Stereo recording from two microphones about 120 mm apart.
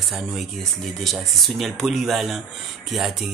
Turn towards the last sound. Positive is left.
turn(degrees=0)  # may be behind; listen again after turning